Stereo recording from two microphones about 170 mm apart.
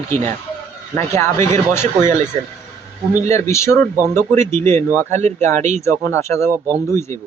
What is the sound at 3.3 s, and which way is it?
Speech, 15° left (ahead or behind).